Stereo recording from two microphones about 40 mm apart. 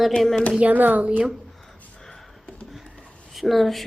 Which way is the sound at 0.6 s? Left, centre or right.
Right.